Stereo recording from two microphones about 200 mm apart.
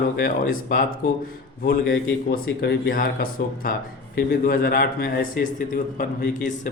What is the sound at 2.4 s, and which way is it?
A man's voice, 45° left (ahead or behind).